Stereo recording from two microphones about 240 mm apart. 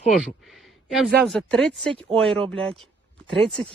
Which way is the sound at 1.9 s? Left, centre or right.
Right.